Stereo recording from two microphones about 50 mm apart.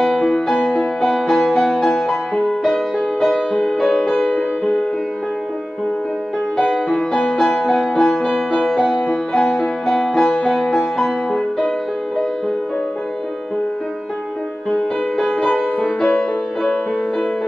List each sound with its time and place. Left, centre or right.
0.2 s music: centre
1.0 s music: centre
1.6 s music: centre
2.4 s music: centre
6.9 s music: centre
16.0 s music: centre